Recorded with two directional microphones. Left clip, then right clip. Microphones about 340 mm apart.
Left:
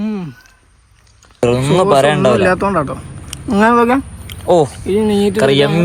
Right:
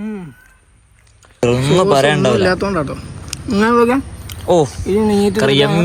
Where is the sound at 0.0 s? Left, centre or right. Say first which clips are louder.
Left 5 dB; left.